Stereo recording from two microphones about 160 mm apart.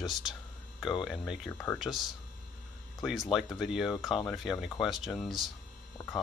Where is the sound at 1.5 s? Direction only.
15° left (ahead or behind).